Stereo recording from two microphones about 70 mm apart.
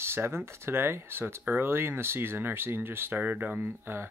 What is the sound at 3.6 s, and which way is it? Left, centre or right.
Speech, right.